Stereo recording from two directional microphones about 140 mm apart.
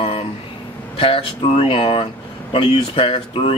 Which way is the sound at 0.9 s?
40° left (ahead or behind).